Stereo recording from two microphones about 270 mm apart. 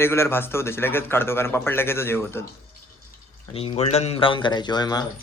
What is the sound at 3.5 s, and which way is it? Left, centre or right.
Speech, left.